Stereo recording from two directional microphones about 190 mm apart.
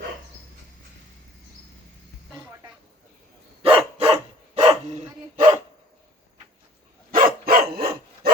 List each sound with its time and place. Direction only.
3.6 s dog: 30° right (ahead or behind)
7.1 s dog: 50° right (ahead or behind)